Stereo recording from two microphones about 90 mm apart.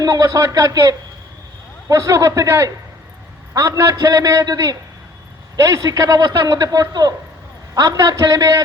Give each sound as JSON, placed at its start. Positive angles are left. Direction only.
{"t": 0.0, "sound": "a man's voice", "side_deg": -40}